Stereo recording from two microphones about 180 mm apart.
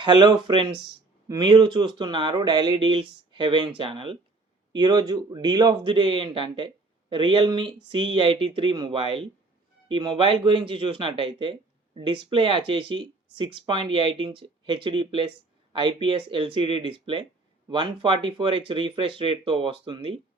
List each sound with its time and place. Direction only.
0.0 s speech: 25° right (ahead or behind)